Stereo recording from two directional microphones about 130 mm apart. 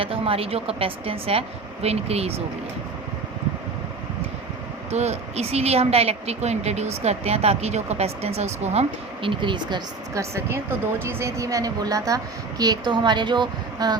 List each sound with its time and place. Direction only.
0.0 s speech: 45° right (ahead or behind)
4.9 s a woman's voice: 60° right (ahead or behind); by 9.8 s 35° right (ahead or behind)
10.2 s a woman's voice: 20° right (ahead or behind)